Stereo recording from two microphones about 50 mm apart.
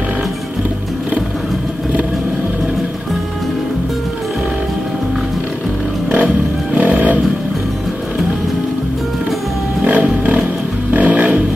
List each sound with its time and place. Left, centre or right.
6.1 s music: right
9.8 s music: right
10.0 s wild animals: right
10.9 s vehicle: right